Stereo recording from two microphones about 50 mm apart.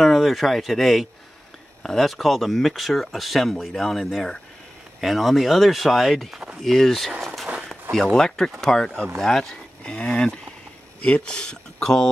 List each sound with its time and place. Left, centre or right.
0.0 s speech: centre
8.7 s speech: centre
9.8 s speech: centre